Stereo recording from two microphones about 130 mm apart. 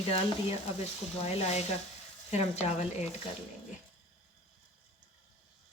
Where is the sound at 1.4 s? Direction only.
55° left (ahead or behind).